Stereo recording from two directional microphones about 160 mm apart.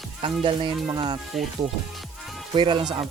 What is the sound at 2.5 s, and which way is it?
Speech, 30° right (ahead or behind).